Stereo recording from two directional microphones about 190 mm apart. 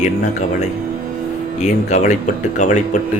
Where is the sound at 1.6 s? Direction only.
40° left (ahead or behind).